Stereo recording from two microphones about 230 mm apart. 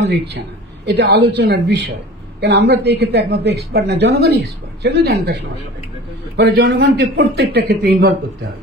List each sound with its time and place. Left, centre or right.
0.8 s speech: right